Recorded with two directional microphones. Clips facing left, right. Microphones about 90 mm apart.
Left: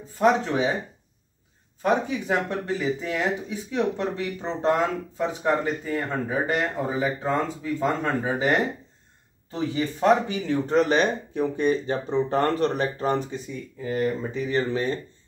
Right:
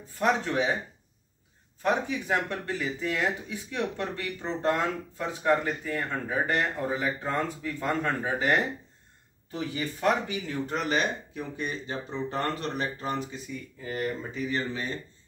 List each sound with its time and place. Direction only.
0.2 s speech: 15° left (ahead or behind)
1.8 s speech: 15° left (ahead or behind)
10.0 s speech: 30° left (ahead or behind)